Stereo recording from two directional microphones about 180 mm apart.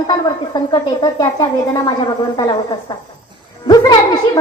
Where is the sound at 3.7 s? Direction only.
25° left (ahead or behind).